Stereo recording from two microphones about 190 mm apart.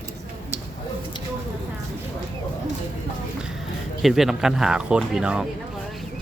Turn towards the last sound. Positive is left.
turn(degrees=-5)  # may be behind; listen again after turning